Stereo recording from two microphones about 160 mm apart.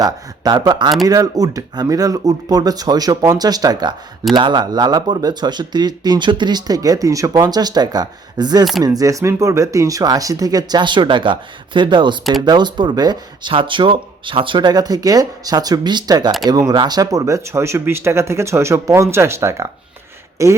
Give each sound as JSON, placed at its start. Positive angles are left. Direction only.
{"t": 0.0, "sound": "speech", "side_deg": -25}